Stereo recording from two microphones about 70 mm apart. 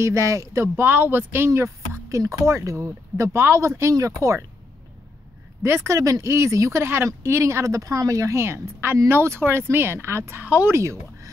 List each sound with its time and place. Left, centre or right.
0.0 s speech: right
0.8 s speech: right
5.6 s speech: right
5.9 s speech: right
10.4 s speech: right
10.7 s speech: right